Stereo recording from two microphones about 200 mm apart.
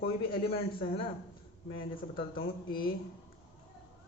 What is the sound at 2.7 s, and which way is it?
Speech, 45° left (ahead or behind).